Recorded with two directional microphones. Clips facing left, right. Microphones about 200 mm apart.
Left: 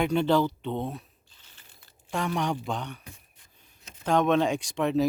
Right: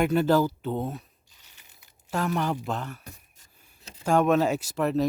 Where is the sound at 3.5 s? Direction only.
10° right (ahead or behind).